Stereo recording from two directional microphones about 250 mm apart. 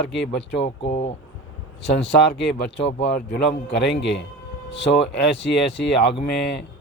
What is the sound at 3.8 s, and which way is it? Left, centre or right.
Speech, left.